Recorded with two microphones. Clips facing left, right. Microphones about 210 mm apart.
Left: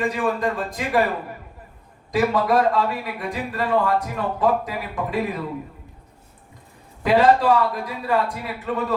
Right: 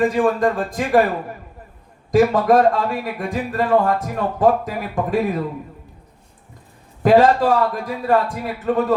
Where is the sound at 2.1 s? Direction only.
45° right (ahead or behind).